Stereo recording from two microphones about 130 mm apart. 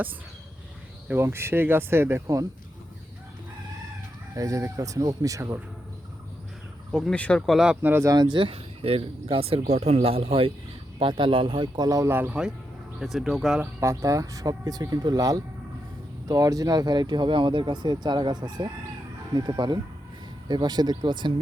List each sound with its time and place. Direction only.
1.0 s speech: 15° right (ahead or behind)
4.4 s speech: 25° right (ahead or behind)
6.9 s speech: 5° left (ahead or behind)
7.8 s speech: 20° right (ahead or behind); by 13.6 s centre (ahead or behind)
13.6 s speech: 25° right (ahead or behind)